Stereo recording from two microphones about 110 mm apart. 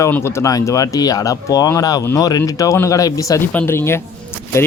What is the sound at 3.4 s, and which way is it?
Speech, 15° left (ahead or behind).